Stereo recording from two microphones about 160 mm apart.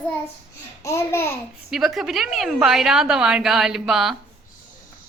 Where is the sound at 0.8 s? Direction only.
15° left (ahead or behind).